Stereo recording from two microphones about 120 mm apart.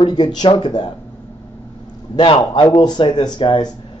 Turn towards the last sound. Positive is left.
turn(degrees=40)  # may be behind; listen again after turning